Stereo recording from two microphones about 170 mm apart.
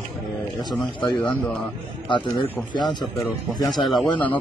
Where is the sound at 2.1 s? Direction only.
25° left (ahead or behind).